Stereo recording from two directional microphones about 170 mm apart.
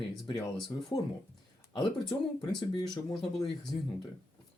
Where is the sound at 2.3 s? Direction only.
25° left (ahead or behind).